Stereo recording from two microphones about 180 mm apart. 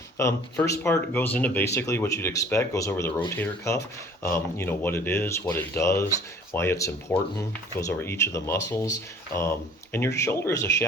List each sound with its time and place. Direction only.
0.2 s speech: 15° left (ahead or behind)